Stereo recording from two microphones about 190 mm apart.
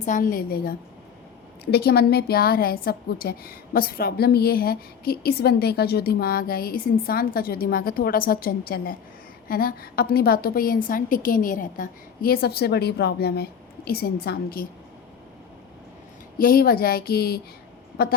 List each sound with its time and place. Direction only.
0.0 s a woman's voice: 45° left (ahead or behind)
16.4 s a woman's voice: 50° left (ahead or behind)